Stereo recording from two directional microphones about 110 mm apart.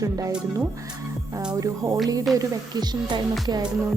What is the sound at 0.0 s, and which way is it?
Speech, 35° right (ahead or behind).